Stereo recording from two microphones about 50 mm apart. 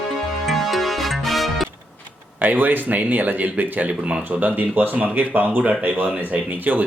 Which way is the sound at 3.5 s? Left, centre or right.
Right.